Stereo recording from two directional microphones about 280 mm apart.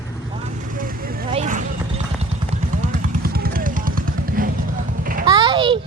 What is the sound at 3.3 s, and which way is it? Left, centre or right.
Music, right.